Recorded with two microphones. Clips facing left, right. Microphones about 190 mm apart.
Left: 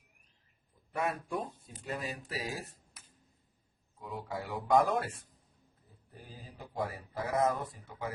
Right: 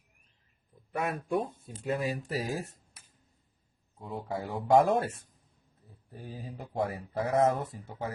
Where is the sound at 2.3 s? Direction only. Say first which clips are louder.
Right 4 dB; 50° right (ahead or behind).